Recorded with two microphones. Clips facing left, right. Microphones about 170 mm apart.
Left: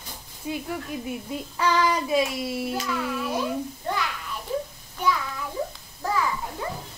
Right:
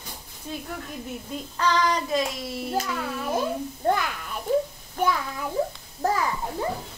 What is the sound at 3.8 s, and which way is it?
A child's voice, 50° right (ahead or behind).